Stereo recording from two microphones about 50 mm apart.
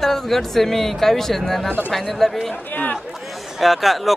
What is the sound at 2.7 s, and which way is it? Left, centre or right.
Speech, left.